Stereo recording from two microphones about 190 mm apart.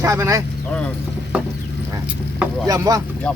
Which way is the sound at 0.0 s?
15° right (ahead or behind).